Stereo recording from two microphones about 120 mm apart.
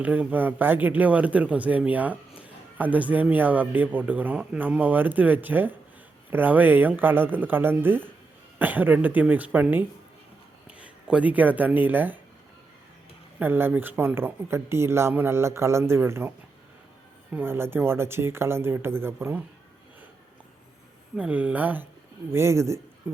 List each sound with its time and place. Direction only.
0.0 s a man's voice: 10° right (ahead or behind)
13.4 s speech: 15° right (ahead or behind)
17.3 s speech: 20° right (ahead or behind)
21.2 s a man's voice: 10° right (ahead or behind)